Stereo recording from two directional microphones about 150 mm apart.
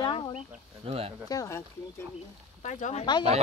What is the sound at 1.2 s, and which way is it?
Speech, 20° left (ahead or behind).